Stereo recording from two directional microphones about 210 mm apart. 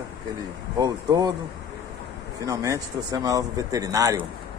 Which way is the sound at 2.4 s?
15° right (ahead or behind).